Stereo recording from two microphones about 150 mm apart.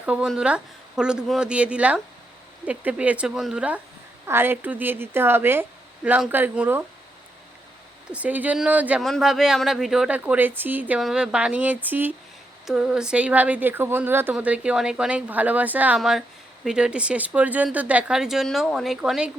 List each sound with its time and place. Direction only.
0.0 s a woman's voice: 5° right (ahead or behind)
8.1 s a woman's voice: 10° right (ahead or behind)
9.0 s a woman's voice: centre (ahead or behind)